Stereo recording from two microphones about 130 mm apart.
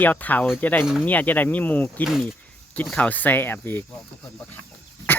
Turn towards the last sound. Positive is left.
turn(degrees=15)  # may be behind; listen again after turning